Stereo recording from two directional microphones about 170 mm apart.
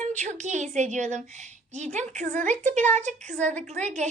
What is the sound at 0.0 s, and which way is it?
Speech, 45° right (ahead or behind).